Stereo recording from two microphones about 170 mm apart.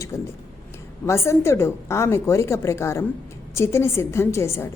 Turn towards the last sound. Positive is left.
turn(degrees=15)  # may be behind; listen again after turning